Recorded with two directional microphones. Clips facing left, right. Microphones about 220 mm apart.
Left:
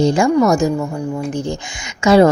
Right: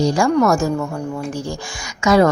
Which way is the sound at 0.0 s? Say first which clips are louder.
Left 2 dB; 25° left (ahead or behind).